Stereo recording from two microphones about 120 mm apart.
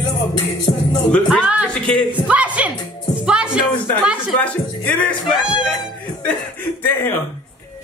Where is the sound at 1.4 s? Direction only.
10° right (ahead or behind).